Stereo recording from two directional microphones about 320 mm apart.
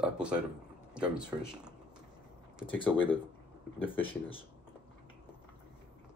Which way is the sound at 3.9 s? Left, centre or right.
Centre.